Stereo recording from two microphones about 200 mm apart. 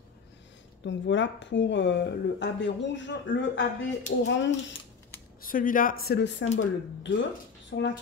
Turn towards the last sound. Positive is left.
turn(degrees=55)  # may be behind; listen again after turning